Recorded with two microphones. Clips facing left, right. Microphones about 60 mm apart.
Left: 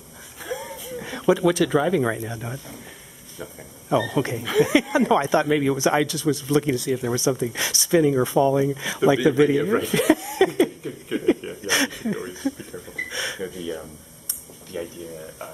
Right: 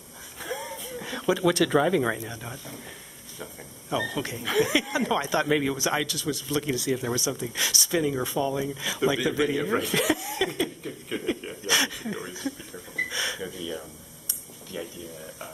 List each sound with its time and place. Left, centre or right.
0.4 s a sound: centre
3.9 s speech: left
4.4 s speech: centre
4.7 s speech: centre
5.4 s speech: centre
5.9 s speech: centre
6.7 s speech: centre
7.2 s speech: left; by 10.4 s centre
11.1 s a sound: centre
14.7 s speech: left